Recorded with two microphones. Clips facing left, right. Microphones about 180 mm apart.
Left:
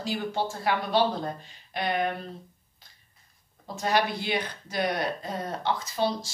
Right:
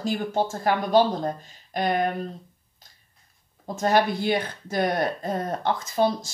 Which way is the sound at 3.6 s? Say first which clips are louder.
Right 5 dB; 50° right (ahead or behind).